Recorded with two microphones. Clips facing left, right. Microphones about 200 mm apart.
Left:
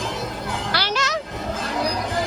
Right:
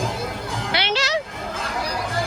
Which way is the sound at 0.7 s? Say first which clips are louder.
Right 3 dB; 30° right (ahead or behind).